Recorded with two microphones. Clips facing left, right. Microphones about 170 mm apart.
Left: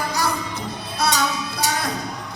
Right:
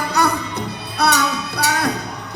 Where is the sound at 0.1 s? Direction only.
65° right (ahead or behind).